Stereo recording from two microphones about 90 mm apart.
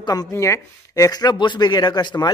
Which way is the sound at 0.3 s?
35° left (ahead or behind).